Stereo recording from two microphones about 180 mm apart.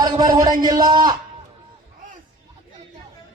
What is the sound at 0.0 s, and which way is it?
Speech, 20° right (ahead or behind).